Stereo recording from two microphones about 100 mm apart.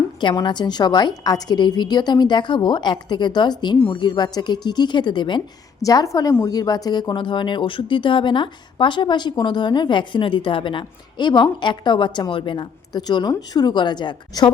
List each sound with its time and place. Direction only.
0.4 s speech: 50° left (ahead or behind)
5.8 s speech: 35° left (ahead or behind); by 12.6 s 55° left (ahead or behind)
12.9 s speech: 45° left (ahead or behind)